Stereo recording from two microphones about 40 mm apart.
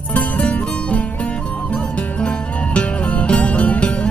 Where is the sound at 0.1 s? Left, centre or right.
Left.